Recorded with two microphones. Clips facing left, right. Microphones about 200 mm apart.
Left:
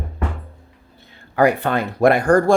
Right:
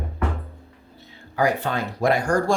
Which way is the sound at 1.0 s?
55° left (ahead or behind).